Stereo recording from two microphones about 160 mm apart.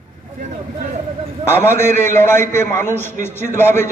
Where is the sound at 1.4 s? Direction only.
15° left (ahead or behind).